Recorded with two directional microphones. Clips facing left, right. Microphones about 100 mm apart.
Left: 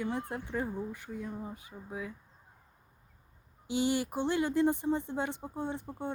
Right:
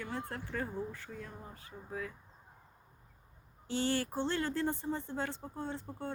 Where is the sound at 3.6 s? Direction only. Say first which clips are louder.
Left 3 dB; 15° left (ahead or behind).